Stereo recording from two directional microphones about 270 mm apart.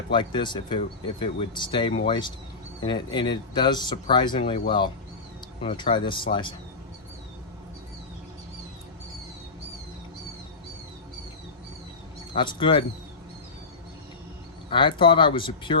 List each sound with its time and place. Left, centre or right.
0.1 s speech: centre
5.6 s speech: centre
12.3 s speech: centre
14.7 s speech: centre